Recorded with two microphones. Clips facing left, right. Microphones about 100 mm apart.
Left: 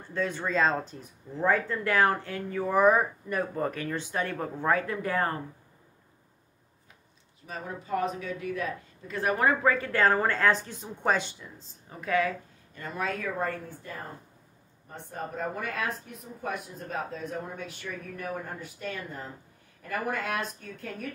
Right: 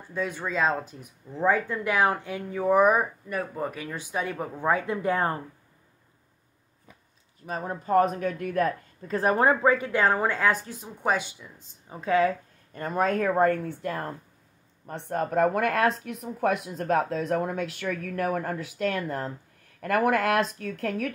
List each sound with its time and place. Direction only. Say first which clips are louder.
0.1 s a woman's voice: even; 10° right (ahead or behind)
3.3 s a woman's voice: left 1 dB; 5° right (ahead or behind); by 5.4 s 20° right (ahead or behind)
7.4 s speech: right 7 dB; 40° right (ahead or behind)
9.1 s a woman's voice: right 4 dB; 35° right (ahead or behind)
12.7 s speech: right 8 dB; 45° right (ahead or behind); by 21.1 s 80° right